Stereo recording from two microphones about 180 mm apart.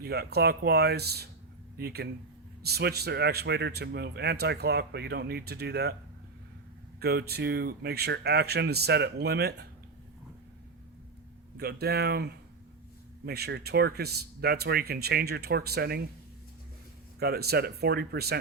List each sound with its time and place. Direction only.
0.0 s speech: 60° right (ahead or behind)
7.0 s speech: 60° right (ahead or behind)
11.5 s speech: 65° right (ahead or behind)
17.2 s speech: 60° right (ahead or behind)